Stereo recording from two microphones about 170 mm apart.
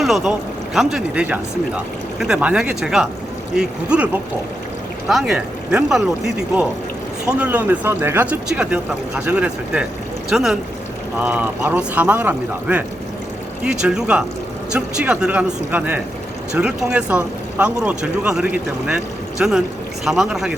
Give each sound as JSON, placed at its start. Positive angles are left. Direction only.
{"t": 0.0, "sound": "speech", "side_deg": 0}